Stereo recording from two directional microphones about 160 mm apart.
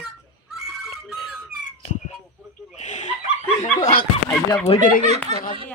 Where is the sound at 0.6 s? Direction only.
Centre (ahead or behind).